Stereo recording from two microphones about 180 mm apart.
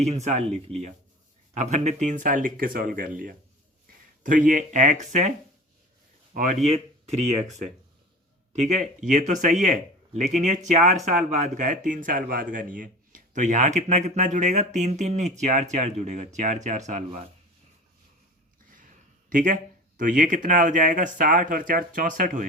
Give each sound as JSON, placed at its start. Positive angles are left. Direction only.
{"t": 0.0, "sound": "speech", "side_deg": -40}
{"t": 6.3, "sound": "speech", "side_deg": -50}
{"t": 6.7, "sound": "speech", "side_deg": -35}
{"t": 19.3, "sound": "speech", "side_deg": -50}